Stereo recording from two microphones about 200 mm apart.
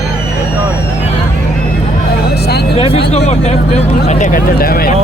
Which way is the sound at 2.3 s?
55° left (ahead or behind).